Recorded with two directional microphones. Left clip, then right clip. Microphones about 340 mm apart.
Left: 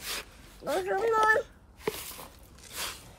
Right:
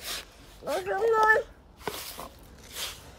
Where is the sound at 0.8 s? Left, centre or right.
Centre.